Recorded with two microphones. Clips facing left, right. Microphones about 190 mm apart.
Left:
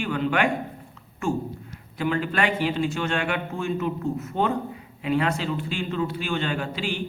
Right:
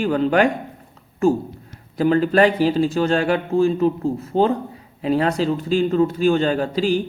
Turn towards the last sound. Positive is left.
turn(degrees=-40)  # may be behind; listen again after turning